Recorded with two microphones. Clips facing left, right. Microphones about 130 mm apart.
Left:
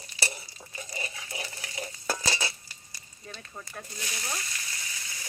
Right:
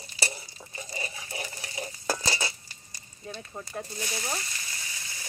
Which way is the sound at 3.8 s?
20° right (ahead or behind).